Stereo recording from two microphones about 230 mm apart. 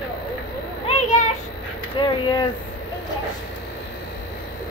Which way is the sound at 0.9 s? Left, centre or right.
Left.